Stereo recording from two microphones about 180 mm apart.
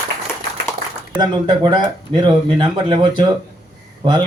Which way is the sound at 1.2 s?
25° right (ahead or behind).